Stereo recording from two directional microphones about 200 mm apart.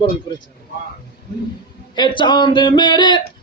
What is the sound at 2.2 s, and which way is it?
Speech, 20° left (ahead or behind).